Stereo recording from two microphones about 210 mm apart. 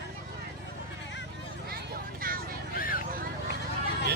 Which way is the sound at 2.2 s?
40° right (ahead or behind).